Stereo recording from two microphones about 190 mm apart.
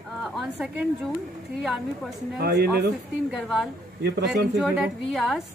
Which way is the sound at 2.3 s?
55° right (ahead or behind).